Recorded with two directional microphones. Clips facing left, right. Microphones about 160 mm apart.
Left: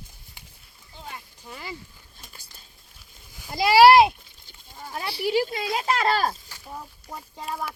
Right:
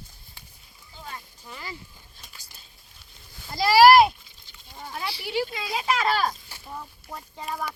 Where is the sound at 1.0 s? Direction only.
15° left (ahead or behind).